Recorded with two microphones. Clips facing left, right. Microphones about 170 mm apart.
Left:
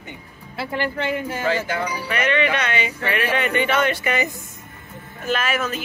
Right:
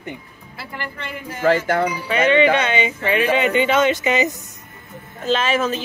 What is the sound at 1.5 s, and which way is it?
Cowbell, 55° right (ahead or behind).